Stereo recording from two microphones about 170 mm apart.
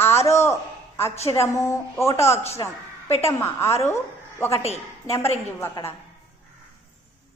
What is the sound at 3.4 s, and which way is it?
Speech, 15° left (ahead or behind).